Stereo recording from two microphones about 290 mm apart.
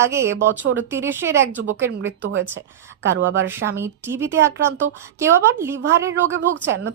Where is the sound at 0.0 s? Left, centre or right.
Centre.